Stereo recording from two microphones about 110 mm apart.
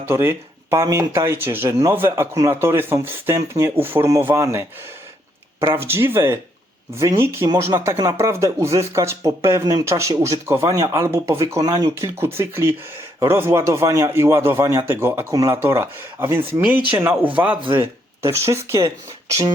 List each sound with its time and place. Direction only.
0.0 s speech: 20° right (ahead or behind)
5.7 s a man's voice: 20° right (ahead or behind)